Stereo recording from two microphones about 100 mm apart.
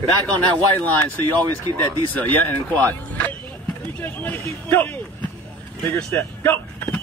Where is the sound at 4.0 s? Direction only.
20° left (ahead or behind).